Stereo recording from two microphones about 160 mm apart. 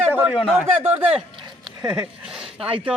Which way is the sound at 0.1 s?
10° right (ahead or behind).